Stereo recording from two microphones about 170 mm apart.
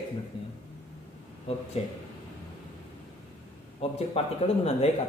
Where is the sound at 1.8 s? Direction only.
35° left (ahead or behind).